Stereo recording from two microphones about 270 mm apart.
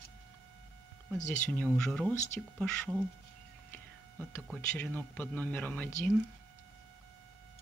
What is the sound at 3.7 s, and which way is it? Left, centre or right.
A man's voice, centre.